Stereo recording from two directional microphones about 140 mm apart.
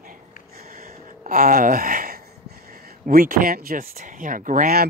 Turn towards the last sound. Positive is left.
turn(degrees=-80)